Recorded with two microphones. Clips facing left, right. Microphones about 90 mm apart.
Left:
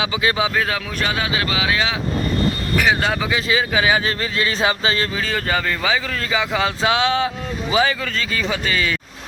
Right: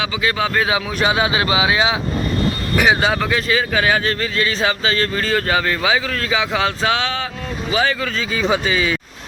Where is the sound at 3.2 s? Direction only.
5° left (ahead or behind).